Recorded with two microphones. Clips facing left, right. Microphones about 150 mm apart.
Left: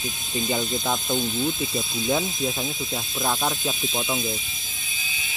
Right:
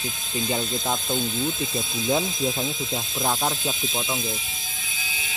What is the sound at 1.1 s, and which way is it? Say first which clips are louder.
Speech: left 1 dB; 10° left (ahead or behind).